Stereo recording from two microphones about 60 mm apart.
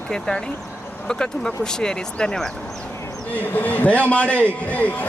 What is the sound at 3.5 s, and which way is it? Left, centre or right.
A man's voice, left.